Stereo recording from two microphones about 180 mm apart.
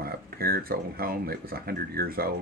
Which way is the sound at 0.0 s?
55° right (ahead or behind).